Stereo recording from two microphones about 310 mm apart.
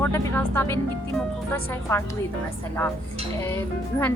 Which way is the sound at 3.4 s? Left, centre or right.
Centre.